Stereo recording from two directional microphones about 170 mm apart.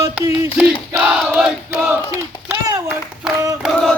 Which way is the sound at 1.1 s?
5° right (ahead or behind).